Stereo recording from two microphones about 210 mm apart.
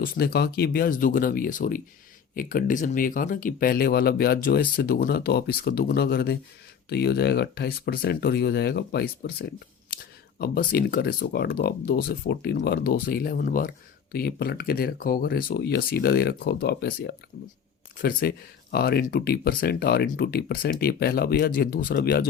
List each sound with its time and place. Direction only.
0.0 s speech: 45° left (ahead or behind)